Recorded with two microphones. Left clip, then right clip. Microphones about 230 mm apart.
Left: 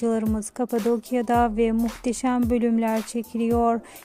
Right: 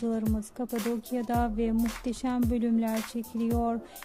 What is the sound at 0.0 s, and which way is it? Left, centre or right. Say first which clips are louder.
Speech: left 7 dB; left.